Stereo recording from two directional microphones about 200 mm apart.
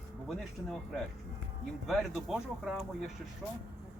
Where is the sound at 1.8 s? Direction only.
Centre (ahead or behind).